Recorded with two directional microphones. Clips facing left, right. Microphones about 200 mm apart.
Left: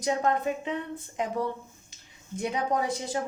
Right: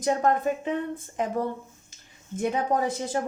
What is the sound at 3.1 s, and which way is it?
Speech, 50° right (ahead or behind).